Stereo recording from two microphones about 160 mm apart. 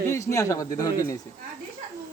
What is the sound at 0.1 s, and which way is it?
A man's voice, 20° left (ahead or behind).